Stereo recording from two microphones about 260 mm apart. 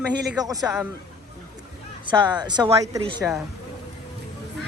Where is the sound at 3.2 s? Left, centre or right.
Centre.